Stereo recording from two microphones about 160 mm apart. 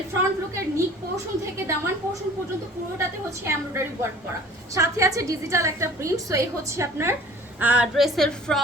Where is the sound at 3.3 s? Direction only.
15° right (ahead or behind).